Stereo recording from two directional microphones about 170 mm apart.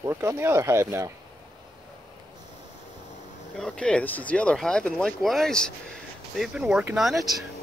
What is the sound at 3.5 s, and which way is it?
Speech, 5° left (ahead or behind).